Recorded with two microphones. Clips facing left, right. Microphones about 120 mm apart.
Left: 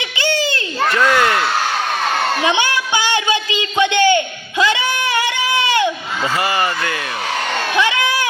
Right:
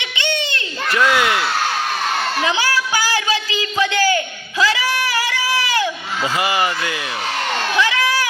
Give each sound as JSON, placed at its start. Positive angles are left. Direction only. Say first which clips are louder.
{"t": 0.2, "sound": "children playing", "louder": "left 4 dB", "side_deg": 35}
{"t": 0.9, "sound": "speech", "louder": "left 1 dB", "side_deg": -10}
{"t": 2.6, "sound": "music", "louder": "left 1 dB", "side_deg": 25}
{"t": 3.9, "sound": "a sound", "louder": "left 4 dB", "side_deg": 25}
{"t": 6.4, "sound": "speech", "louder": "even", "side_deg": -15}
{"t": 7.8, "sound": "baby cry", "louder": "left 1 dB", "side_deg": 25}